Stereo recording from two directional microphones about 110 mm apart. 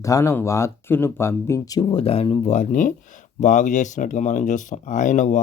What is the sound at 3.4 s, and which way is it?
Speech, 90° left.